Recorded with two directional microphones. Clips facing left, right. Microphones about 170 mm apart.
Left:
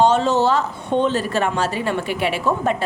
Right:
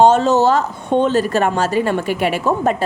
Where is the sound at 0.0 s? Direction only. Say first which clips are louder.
Right 4 dB; 45° right (ahead or behind).